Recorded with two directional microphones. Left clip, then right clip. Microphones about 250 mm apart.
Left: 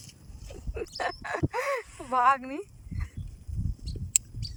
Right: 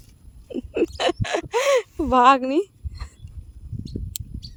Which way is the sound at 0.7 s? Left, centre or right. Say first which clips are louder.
Right 11 dB; right.